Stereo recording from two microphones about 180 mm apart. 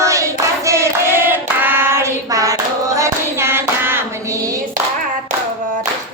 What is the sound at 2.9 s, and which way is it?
Hands, 15° right (ahead or behind).